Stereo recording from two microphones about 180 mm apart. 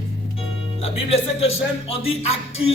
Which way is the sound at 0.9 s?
35° left (ahead or behind).